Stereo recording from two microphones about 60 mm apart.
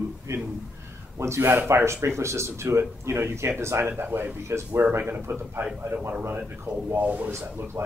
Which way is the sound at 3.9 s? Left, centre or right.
Right.